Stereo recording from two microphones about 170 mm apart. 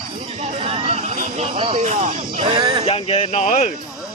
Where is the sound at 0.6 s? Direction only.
35° right (ahead or behind).